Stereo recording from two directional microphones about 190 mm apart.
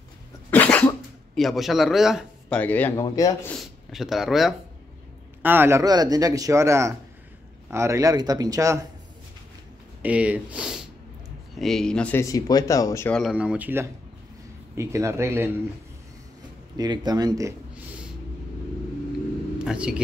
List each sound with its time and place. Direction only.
0.5 s throat clearing: 10° left (ahead or behind)
2.6 s speech: 10° left (ahead or behind)
3.5 s speech: centre (ahead or behind); by 8.8 s 15° right (ahead or behind)
10.0 s speech: 5° right (ahead or behind); by 13.1 s 15° left (ahead or behind)
13.1 s speech: 5° right (ahead or behind)
16.7 s speech: 20° right (ahead or behind)
19.6 s speech: 5° right (ahead or behind)